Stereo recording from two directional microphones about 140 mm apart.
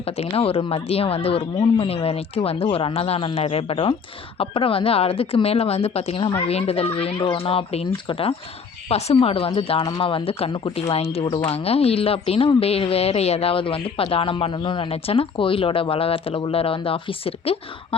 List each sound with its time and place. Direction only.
0.0 s speech: 45° left (ahead or behind)